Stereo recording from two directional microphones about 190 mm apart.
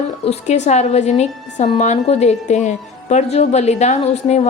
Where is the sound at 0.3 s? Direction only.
35° left (ahead or behind).